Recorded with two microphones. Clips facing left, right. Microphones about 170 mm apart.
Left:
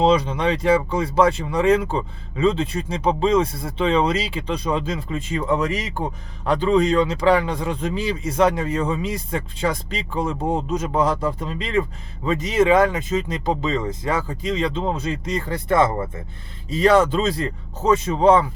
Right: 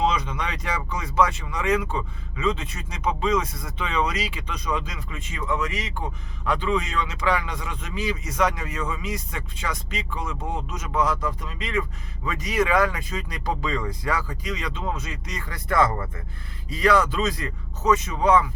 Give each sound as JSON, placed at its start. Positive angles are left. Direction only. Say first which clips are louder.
{"t": 0.0, "sound": "speech", "louder": "left 7 dB", "side_deg": 30}